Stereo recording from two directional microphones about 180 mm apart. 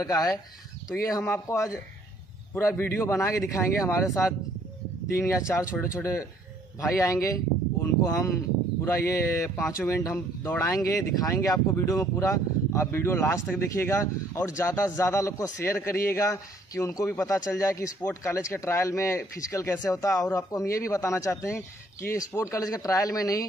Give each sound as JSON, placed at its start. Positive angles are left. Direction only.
{"t": 0.0, "sound": "speech", "side_deg": 20}
{"t": 6.9, "sound": "speech", "side_deg": 15}